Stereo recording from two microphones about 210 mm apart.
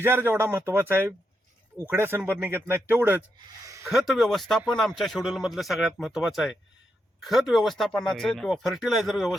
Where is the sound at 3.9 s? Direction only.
Centre (ahead or behind).